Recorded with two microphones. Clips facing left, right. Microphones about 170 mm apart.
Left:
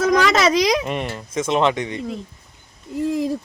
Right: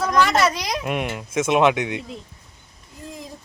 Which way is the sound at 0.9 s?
5° right (ahead or behind).